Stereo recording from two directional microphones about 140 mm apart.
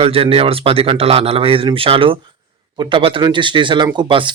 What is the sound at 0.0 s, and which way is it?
Speech, 40° right (ahead or behind).